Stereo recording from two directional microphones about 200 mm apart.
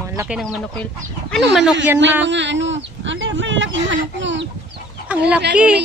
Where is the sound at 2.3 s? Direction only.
65° right (ahead or behind).